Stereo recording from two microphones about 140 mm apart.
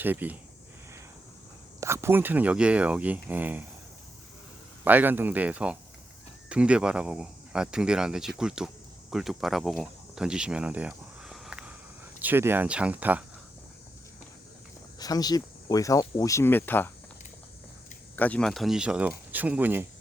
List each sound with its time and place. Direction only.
0.0 s speech: 15° right (ahead or behind)
1.8 s speech: 20° right (ahead or behind)
4.8 s speech: 10° right (ahead or behind)
14.9 s speech: 25° left (ahead or behind)
18.2 s speech: 10° left (ahead or behind); by 19.9 s 15° right (ahead or behind)